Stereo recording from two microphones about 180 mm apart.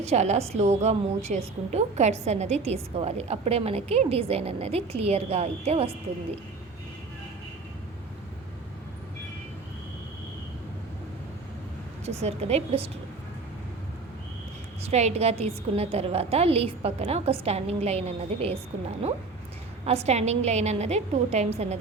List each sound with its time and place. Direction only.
0.0 s a woman's voice: 40° right (ahead or behind)
12.2 s a woman's voice: 35° right (ahead or behind)
14.8 s a woman's voice: 35° right (ahead or behind)
19.8 s a woman's voice: 35° right (ahead or behind)